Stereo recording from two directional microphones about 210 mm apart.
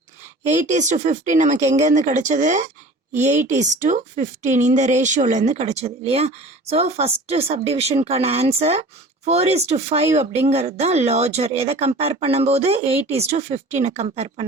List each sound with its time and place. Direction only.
0.4 s speech: 35° right (ahead or behind)